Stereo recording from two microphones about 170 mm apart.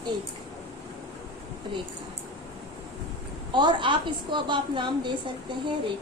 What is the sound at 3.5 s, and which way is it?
A woman's voice, 25° right (ahead or behind).